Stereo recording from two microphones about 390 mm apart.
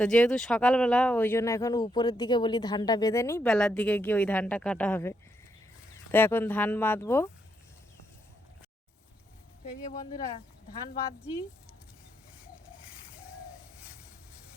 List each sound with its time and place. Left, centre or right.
0.0 s speech: centre
9.8 s speech: centre